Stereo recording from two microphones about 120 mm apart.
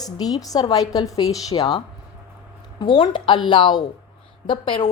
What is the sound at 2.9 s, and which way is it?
A woman's voice, 40° left (ahead or behind).